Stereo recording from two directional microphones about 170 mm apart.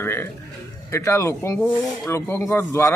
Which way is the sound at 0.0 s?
15° left (ahead or behind).